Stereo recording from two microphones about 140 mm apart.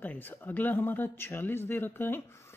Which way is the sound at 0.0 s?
15° left (ahead or behind).